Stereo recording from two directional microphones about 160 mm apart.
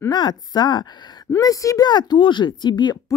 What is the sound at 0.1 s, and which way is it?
A woman's voice, 30° left (ahead or behind).